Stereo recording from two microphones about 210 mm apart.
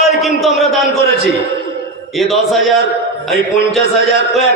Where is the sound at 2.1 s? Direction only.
Centre (ahead or behind).